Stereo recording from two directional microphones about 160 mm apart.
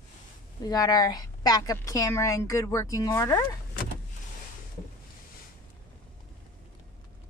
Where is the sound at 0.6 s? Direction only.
25° left (ahead or behind).